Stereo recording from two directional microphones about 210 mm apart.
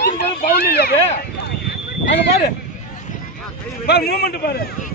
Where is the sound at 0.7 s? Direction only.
50° left (ahead or behind).